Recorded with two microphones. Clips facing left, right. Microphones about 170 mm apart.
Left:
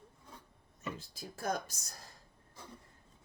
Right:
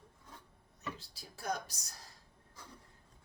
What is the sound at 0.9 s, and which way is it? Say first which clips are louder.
Speech: left 7 dB; 50° left (ahead or behind).